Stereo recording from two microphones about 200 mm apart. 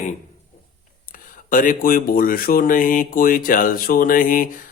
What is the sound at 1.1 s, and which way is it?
Speech, 45° left (ahead or behind).